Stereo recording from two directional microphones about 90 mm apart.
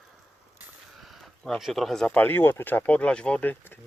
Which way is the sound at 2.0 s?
15° left (ahead or behind).